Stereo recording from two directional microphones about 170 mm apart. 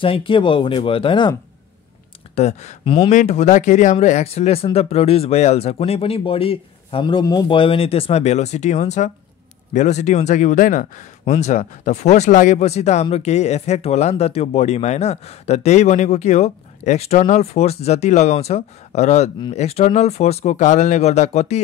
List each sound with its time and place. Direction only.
0.0 s speech: 30° left (ahead or behind)
2.3 s speech: 40° left (ahead or behind)